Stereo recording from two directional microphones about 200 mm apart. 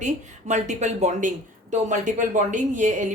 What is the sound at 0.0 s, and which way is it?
A woman's voice, 35° right (ahead or behind).